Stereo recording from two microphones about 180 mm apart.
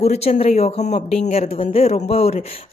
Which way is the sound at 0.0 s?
35° left (ahead or behind).